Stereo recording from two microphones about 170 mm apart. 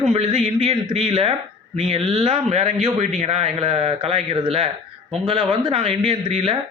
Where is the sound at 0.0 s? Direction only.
35° right (ahead or behind).